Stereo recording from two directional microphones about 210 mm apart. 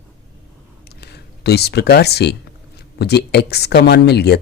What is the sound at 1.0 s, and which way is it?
Speech, 50° left (ahead or behind).